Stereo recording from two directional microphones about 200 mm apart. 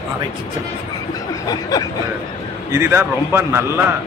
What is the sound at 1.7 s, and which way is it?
Speech, 20° left (ahead or behind).